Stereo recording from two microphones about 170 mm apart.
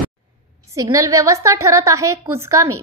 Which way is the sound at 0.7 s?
20° right (ahead or behind).